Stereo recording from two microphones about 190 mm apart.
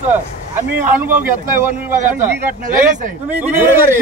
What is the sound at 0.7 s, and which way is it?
A man's voice, 10° right (ahead or behind).